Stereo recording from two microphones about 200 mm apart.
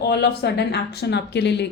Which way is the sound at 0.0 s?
55° left (ahead or behind).